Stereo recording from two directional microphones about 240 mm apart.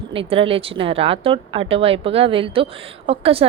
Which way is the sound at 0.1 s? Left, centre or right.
Right.